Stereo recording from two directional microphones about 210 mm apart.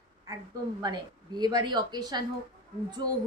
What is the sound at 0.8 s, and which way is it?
A woman's voice, 20° right (ahead or behind).